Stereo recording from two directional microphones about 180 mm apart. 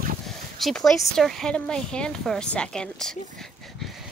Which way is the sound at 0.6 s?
Centre (ahead or behind).